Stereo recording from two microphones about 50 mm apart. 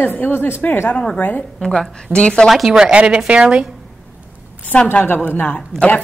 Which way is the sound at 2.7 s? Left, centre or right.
Centre.